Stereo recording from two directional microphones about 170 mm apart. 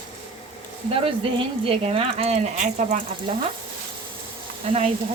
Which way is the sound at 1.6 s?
35° right (ahead or behind).